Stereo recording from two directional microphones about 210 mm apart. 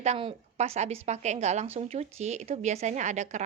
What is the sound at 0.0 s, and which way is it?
A woman's voice, 30° right (ahead or behind).